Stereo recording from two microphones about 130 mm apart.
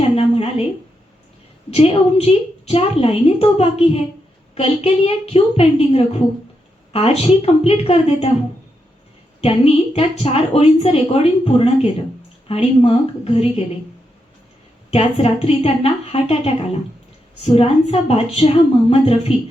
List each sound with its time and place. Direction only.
0.2 s a sound: 50° left (ahead or behind)
1.7 s a woman's voice: 50° left (ahead or behind)
9.4 s a woman's voice: 45° left (ahead or behind)
14.8 s a woman's voice: 50° left (ahead or behind)